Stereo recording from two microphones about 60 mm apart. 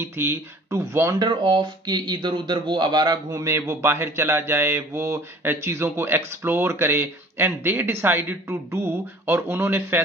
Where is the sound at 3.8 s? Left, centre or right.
Right.